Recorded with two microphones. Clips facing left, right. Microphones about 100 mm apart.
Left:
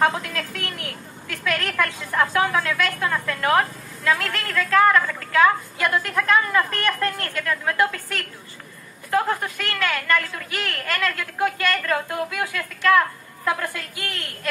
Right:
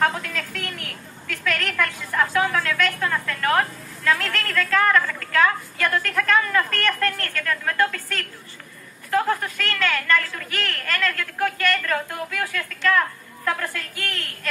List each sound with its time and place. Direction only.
0.1 s a woman's voice: 15° left (ahead or behind)